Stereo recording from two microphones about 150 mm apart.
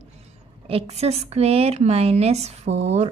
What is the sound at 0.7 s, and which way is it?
A woman's voice, 45° right (ahead or behind).